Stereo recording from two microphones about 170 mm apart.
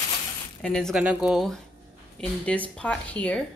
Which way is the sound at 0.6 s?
5° left (ahead or behind).